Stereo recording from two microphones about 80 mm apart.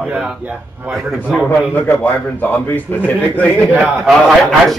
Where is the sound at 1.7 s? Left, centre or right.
Left.